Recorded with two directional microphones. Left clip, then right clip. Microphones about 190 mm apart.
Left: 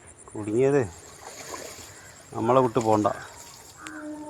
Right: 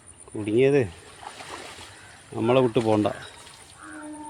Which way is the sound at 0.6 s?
40° right (ahead or behind).